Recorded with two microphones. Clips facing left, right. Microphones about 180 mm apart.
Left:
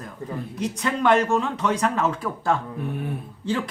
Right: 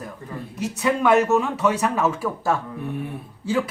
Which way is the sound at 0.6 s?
5° right (ahead or behind).